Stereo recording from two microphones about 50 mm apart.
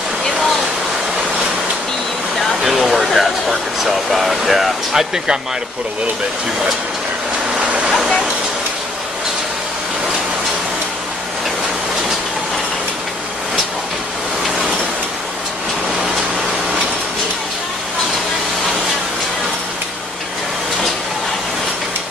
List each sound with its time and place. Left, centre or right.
2.3 s speech: centre
7.5 s waterfall: right